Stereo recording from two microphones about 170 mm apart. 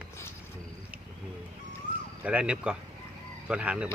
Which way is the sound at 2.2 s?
5° right (ahead or behind).